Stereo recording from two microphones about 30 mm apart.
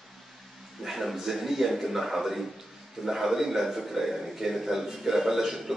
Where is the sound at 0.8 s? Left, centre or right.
Centre.